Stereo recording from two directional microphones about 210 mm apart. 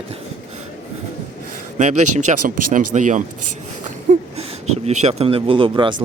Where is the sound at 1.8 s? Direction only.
35° right (ahead or behind).